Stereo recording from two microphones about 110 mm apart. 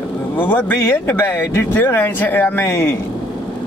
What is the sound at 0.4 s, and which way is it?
Speech, 15° left (ahead or behind).